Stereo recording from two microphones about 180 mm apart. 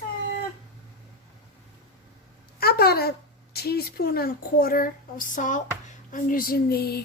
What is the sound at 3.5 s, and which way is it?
A woman's voice, 60° left (ahead or behind).